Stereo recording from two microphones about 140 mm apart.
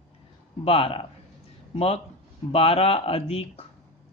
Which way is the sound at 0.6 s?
45° left (ahead or behind).